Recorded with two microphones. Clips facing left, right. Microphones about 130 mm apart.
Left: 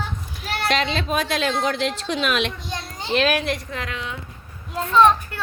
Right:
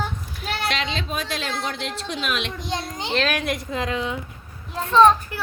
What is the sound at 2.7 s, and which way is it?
Children playing, 20° right (ahead or behind).